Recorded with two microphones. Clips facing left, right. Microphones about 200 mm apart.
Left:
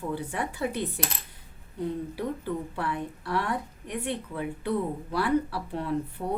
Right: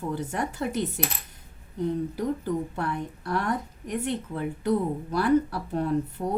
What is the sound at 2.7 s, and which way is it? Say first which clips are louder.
Speech: right 1 dB; 45° right (ahead or behind).